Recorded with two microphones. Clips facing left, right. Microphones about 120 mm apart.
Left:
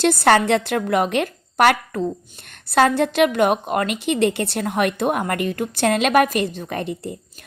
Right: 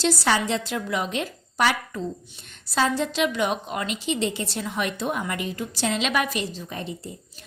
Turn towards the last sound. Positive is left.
turn(degrees=60)  # may be behind; listen again after turning